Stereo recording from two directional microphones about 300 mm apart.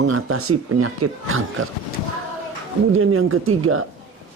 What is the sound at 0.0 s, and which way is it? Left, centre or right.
Speech, right.